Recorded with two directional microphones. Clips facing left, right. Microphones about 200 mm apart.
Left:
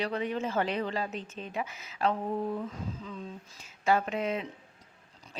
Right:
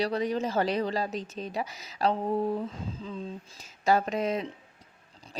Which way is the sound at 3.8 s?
40° right (ahead or behind).